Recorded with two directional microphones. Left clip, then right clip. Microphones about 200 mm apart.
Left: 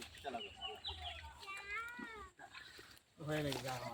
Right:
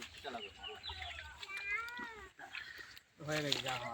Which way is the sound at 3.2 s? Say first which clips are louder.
Right 2 dB; 30° left (ahead or behind).